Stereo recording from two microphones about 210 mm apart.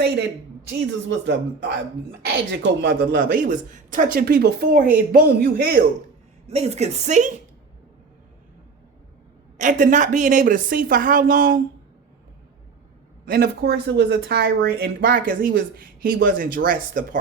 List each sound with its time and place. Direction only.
0.7 s speech: 55° right (ahead or behind)
6.5 s a woman's voice: 30° right (ahead or behind)
9.6 s a woman's voice: 40° right (ahead or behind)
13.2 s speech: 45° right (ahead or behind)